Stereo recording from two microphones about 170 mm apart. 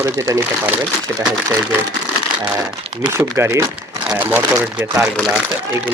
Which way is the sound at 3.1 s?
15° right (ahead or behind).